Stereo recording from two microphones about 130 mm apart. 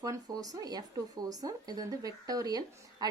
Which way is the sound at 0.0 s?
30° right (ahead or behind).